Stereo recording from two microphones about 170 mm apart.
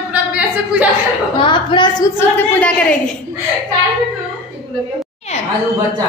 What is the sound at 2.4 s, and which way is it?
Speech, 10° left (ahead or behind).